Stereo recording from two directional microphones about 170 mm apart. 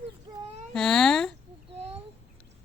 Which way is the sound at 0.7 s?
5° left (ahead or behind).